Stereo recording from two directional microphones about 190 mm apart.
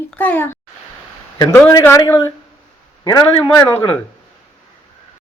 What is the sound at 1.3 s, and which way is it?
Speech, 20° left (ahead or behind).